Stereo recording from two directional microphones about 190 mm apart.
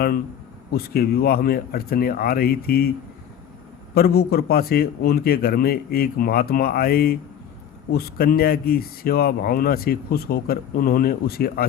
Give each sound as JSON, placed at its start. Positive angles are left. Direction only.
{"t": 0.7, "sound": "speech", "side_deg": 55}
{"t": 3.9, "sound": "speech", "side_deg": 55}